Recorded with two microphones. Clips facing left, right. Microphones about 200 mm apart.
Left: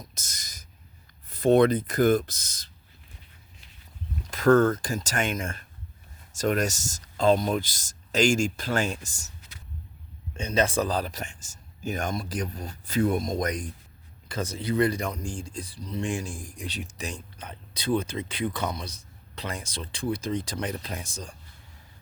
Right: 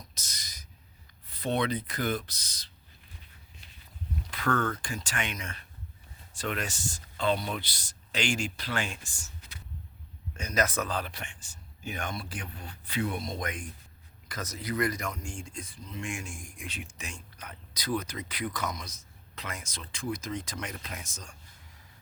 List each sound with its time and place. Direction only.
0.1 s a sound: 50° left (ahead or behind)
1.3 s speech: 45° left (ahead or behind)
4.3 s speech: 45° left (ahead or behind)
10.3 s speech: 30° left (ahead or behind)
14.3 s speech: 30° left (ahead or behind)